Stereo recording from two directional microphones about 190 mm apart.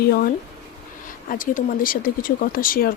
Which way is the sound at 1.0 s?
45° left (ahead or behind).